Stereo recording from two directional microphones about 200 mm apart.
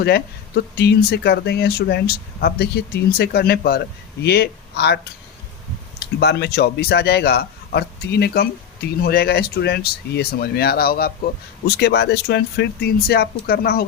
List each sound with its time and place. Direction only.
0.0 s a man's voice: 50° left (ahead or behind)
6.1 s a man's voice: 55° left (ahead or behind)